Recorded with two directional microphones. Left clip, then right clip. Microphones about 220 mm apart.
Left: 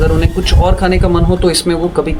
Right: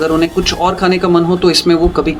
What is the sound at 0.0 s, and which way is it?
Speech, 15° right (ahead or behind).